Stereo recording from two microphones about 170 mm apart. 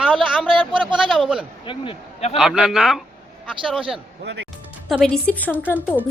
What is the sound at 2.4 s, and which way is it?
A woman's voice, 5° right (ahead or behind).